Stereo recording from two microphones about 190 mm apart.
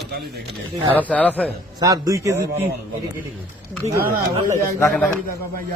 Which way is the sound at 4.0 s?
50° right (ahead or behind).